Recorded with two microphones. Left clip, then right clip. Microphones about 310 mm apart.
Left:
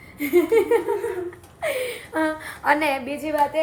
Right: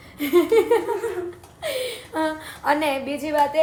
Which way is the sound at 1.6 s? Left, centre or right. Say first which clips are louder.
Left 1 dB; centre.